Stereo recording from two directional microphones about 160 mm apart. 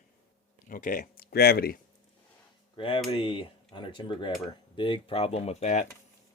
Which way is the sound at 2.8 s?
35° left (ahead or behind).